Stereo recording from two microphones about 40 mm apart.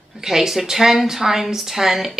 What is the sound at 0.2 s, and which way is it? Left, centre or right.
A woman's voice, centre.